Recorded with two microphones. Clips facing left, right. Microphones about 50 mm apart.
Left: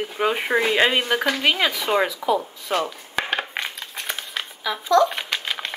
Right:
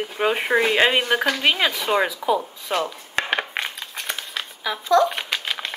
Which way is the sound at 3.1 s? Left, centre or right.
Right.